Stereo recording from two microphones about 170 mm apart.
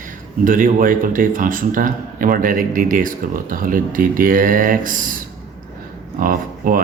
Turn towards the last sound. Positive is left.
turn(degrees=-55)  # may be behind; listen again after turning